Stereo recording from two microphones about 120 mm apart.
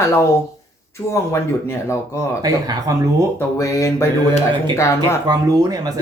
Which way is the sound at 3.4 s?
25° left (ahead or behind).